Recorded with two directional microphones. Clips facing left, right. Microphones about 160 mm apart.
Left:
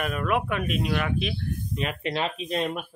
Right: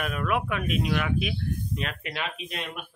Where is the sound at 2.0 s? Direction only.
35° left (ahead or behind).